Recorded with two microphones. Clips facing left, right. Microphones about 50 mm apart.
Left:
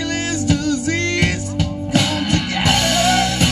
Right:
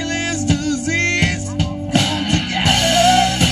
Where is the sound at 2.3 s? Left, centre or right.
Right.